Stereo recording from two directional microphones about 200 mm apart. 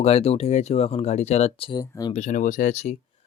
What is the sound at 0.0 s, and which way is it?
Speech, 30° left (ahead or behind).